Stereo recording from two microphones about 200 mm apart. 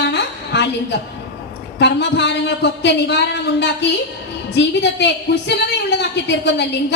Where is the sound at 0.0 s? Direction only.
60° left (ahead or behind).